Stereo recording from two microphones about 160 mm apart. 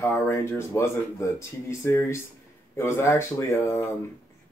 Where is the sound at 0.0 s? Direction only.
15° left (ahead or behind).